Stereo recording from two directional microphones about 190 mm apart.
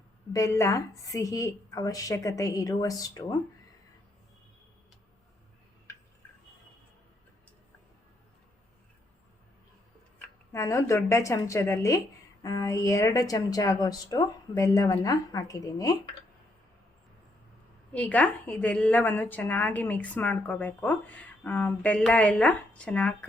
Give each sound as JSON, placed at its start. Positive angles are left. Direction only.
{"t": 0.3, "sound": "a woman's voice", "side_deg": 15}
{"t": 10.2, "sound": "a woman's voice", "side_deg": 15}
{"t": 17.9, "sound": "a woman's voice", "side_deg": 5}